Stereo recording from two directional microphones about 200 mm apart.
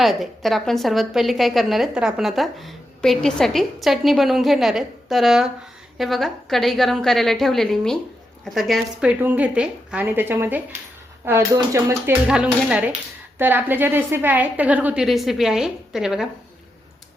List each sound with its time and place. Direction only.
0.0 s a woman's voice: centre (ahead or behind)
12.3 s a woman's voice: 5° right (ahead or behind)